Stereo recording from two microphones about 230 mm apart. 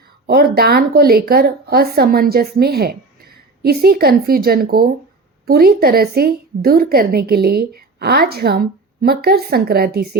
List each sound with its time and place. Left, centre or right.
0.3 s a woman's voice: right